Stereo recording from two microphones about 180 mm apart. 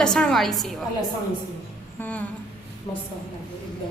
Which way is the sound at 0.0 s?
5° left (ahead or behind).